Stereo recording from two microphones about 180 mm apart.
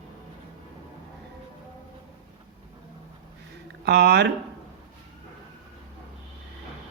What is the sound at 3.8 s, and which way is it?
Speech, 70° right (ahead or behind).